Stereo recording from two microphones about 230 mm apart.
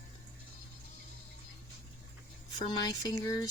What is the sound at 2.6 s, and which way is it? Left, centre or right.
Speech, centre.